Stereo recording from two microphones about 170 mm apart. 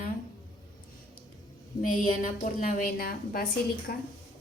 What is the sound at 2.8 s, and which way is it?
Speech, 55° left (ahead or behind).